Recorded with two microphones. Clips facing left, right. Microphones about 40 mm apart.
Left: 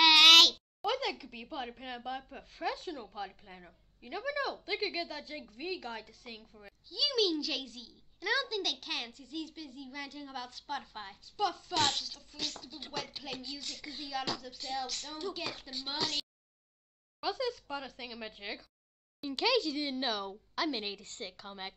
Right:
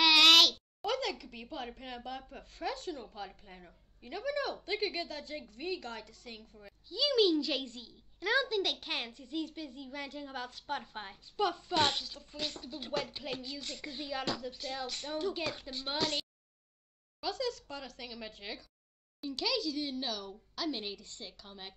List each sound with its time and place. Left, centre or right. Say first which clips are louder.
0.0 s a child's voice: left 2 dB; centre
6.9 s a child's voice: right 3 dB; centre
17.2 s a woman's voice: left 1 dB; centre